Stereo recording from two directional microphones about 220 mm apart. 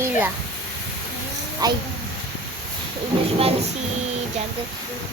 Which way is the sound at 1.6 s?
20° right (ahead or behind).